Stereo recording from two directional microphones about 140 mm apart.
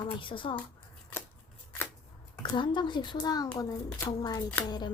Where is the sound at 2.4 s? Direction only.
35° left (ahead or behind).